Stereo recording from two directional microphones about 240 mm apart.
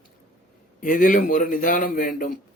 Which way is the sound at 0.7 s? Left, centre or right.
Left.